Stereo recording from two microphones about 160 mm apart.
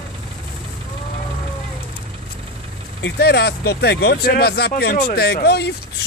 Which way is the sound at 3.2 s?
80° left.